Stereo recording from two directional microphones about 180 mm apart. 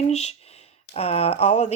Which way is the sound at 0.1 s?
35° left (ahead or behind).